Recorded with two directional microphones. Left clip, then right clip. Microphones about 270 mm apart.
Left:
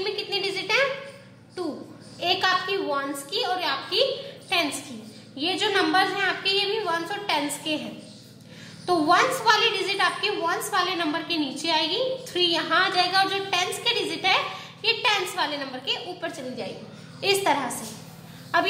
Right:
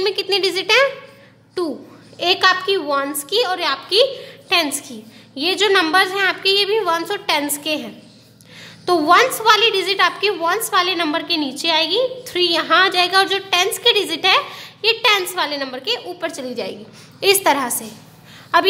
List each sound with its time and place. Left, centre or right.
0.0 s speech: right
2.1 s a woman's voice: right
8.8 s a woman's voice: right